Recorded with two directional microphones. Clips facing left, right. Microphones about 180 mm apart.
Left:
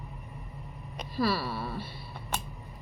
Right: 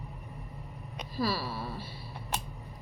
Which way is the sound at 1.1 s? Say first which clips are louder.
Left 3 dB; 40° right (ahead or behind).